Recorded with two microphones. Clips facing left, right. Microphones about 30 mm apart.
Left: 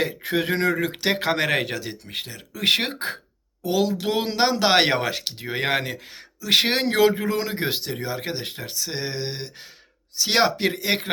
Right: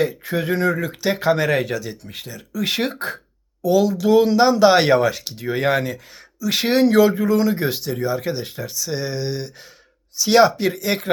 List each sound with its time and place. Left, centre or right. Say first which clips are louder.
0.0 s speech: right 2 dB; left
1.7 s speech: right 3 dB; left